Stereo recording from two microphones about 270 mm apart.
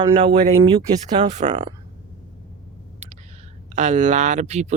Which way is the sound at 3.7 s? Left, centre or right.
Right.